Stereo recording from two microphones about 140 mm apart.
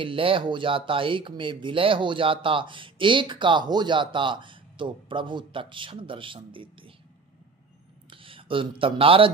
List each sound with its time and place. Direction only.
0.0 s speech: 40° right (ahead or behind)
8.1 s speech: 40° right (ahead or behind)